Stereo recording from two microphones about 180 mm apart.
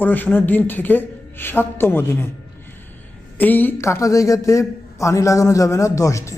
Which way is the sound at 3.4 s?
10° left (ahead or behind).